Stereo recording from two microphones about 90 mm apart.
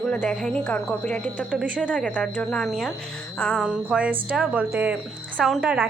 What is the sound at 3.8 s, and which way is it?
A woman's voice, 15° right (ahead or behind).